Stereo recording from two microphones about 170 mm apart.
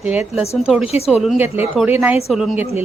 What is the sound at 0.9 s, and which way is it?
Speech, 35° left (ahead or behind).